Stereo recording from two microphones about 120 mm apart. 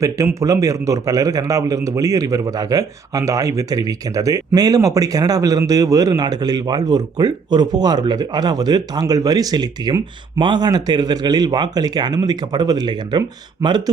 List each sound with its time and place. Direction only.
0.0 s a man's voice: 25° right (ahead or behind)